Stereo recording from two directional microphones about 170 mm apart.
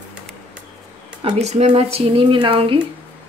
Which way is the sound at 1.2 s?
40° right (ahead or behind).